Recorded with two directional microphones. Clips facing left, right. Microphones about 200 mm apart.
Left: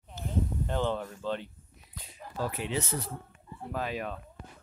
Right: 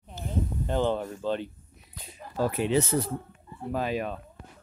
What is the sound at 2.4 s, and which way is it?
Speech, 45° right (ahead or behind).